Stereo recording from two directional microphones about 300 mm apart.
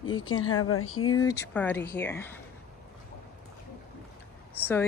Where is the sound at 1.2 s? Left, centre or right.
Centre.